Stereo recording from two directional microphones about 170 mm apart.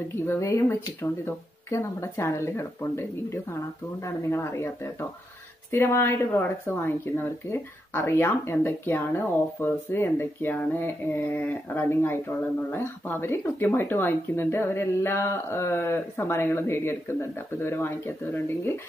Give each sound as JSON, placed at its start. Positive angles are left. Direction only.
{"t": 0.1, "sound": "speech", "side_deg": 15}